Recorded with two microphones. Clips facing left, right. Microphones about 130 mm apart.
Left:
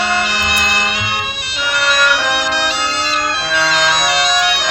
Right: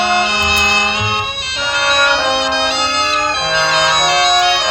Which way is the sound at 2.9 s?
60° right (ahead or behind).